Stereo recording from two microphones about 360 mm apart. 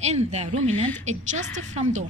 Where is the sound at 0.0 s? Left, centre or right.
Centre.